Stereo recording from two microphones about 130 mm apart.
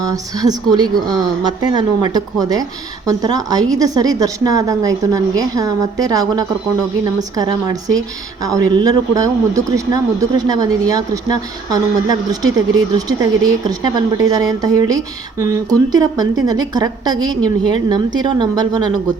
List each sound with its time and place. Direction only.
0.0 s a woman's voice: 30° right (ahead or behind)